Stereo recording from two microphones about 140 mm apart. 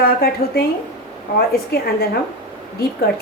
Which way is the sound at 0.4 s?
90° left.